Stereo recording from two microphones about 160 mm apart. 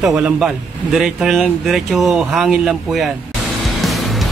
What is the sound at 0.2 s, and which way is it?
A man's voice, 5° right (ahead or behind).